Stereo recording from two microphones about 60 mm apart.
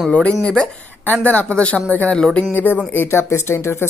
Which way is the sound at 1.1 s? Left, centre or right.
Left.